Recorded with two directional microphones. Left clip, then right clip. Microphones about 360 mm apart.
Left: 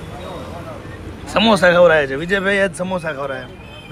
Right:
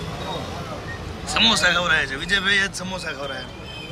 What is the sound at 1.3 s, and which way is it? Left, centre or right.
A man's voice, centre.